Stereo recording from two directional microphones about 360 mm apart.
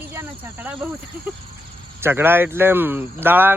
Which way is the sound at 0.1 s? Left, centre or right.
Centre.